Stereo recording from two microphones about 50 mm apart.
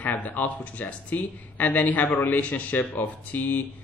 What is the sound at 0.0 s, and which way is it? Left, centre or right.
Speech, left.